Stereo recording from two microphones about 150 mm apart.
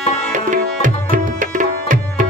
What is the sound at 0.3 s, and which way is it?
Tabla, 60° right (ahead or behind).